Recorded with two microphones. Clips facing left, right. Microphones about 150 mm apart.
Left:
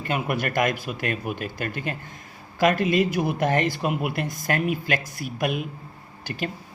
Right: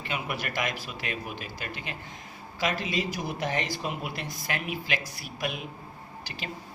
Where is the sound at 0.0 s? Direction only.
50° left (ahead or behind).